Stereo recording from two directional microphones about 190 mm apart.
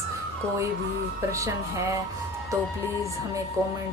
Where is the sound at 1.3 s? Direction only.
15° right (ahead or behind).